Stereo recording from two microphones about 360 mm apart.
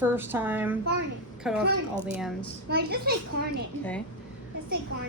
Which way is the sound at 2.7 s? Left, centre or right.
Right.